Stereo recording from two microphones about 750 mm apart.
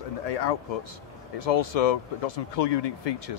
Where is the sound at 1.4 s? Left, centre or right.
Left.